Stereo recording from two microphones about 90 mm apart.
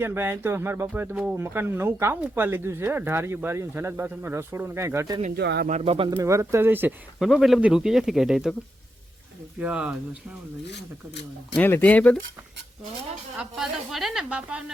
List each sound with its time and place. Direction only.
0.0 s speech: 25° right (ahead or behind)
1.1 s speech: 10° right (ahead or behind)
1.4 s speech: 25° right (ahead or behind)
5.8 s speech: 90° right
6.1 s speech: 30° right (ahead or behind)
7.2 s speech: centre (ahead or behind)
9.6 s speech: 15° right (ahead or behind)
11.6 s speech: 20° left (ahead or behind)
13.3 s speech: 5° right (ahead or behind)